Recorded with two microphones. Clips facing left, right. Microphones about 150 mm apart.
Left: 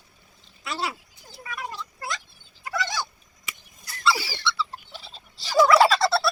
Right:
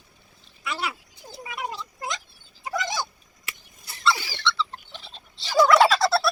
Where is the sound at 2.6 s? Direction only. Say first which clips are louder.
Right 1 dB; 20° right (ahead or behind).